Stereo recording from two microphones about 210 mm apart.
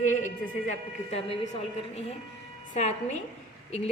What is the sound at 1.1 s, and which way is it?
A woman's voice, 30° left (ahead or behind).